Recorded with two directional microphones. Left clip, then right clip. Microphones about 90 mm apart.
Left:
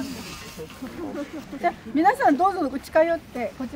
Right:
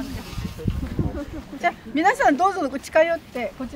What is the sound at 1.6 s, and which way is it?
Speech, 35° right (ahead or behind).